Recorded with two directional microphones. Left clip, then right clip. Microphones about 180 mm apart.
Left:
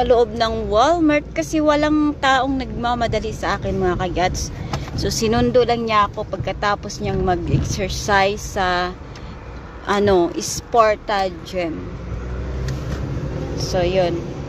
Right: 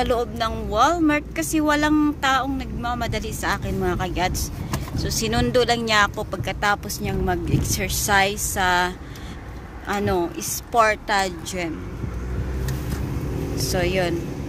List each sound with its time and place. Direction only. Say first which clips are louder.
0.2 s speech: left 7 dB; 20° left (ahead or behind)
9.8 s speech: left 7 dB; 20° left (ahead or behind)
10.7 s speech: left 3 dB; 5° left (ahead or behind)
13.6 s speech: left 5 dB; centre (ahead or behind)